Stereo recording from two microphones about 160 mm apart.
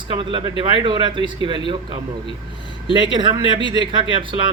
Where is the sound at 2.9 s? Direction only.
30° right (ahead or behind).